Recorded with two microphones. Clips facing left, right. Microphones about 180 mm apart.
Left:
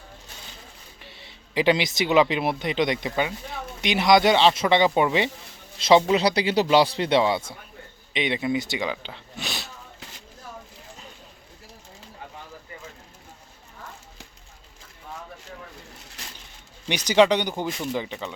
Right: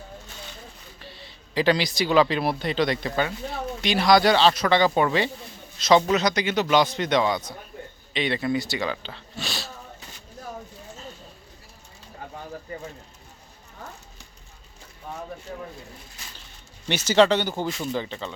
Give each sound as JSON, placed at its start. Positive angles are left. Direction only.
{"t": 1.5, "sound": "speech", "side_deg": 20}
{"t": 16.9, "sound": "speech", "side_deg": 15}